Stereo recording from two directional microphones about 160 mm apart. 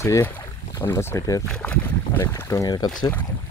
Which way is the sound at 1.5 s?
5° left (ahead or behind).